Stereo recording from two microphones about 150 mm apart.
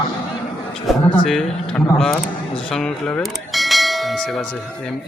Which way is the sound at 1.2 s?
Centre (ahead or behind).